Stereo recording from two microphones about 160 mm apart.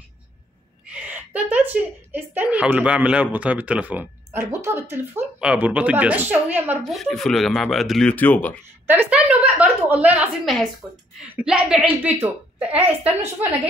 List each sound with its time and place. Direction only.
1.1 s speech: 10° right (ahead or behind)
6.8 s speech: centre (ahead or behind)
8.8 s speech: 10° right (ahead or behind)